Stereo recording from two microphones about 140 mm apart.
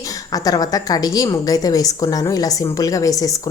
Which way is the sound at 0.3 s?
25° left (ahead or behind).